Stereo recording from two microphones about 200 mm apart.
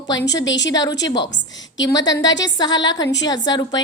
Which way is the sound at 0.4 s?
65° left (ahead or behind).